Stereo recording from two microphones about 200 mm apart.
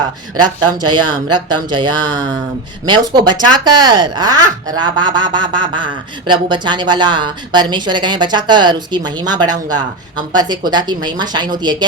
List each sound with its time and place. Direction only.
0.4 s speech: 20° right (ahead or behind)